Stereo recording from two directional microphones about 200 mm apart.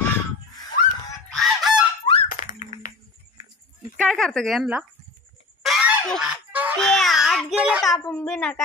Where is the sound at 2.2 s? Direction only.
40° left (ahead or behind).